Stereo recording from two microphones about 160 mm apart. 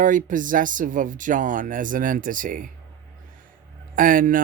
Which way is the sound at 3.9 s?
60° right (ahead or behind).